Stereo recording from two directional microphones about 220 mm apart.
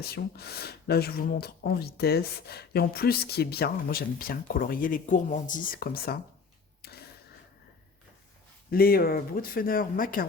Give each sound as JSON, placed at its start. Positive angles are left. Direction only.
{"t": 0.0, "sound": "speech", "side_deg": 45}
{"t": 6.8, "sound": "a sound", "side_deg": 45}
{"t": 8.7, "sound": "speech", "side_deg": 45}